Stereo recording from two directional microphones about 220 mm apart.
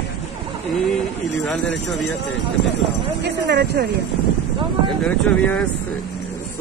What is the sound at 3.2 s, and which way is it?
Speech, 50° right (ahead or behind).